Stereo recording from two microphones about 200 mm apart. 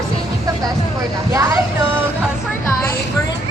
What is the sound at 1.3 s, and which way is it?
Vehicle, 15° right (ahead or behind).